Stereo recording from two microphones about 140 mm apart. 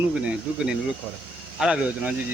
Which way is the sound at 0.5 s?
10° right (ahead or behind).